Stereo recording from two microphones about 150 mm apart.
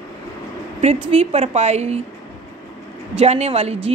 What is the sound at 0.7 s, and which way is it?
Speech, 45° right (ahead or behind).